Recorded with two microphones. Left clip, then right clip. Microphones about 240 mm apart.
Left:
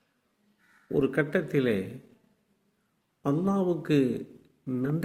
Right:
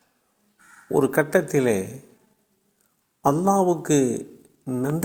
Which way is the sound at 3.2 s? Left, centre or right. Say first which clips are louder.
Right 9 dB; centre.